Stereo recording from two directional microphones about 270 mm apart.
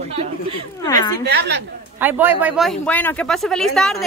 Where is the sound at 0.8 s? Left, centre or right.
Centre.